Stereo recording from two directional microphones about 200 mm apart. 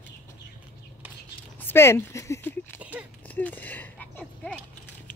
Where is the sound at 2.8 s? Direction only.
5° right (ahead or behind).